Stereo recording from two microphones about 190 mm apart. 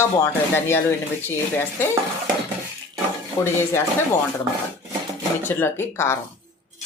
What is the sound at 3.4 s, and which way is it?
Stir, 15° left (ahead or behind).